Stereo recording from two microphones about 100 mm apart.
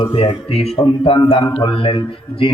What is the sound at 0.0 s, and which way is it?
Mantra, 65° left (ahead or behind).